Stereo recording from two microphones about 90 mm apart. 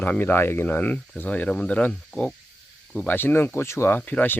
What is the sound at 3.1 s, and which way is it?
Speech, 25° left (ahead or behind).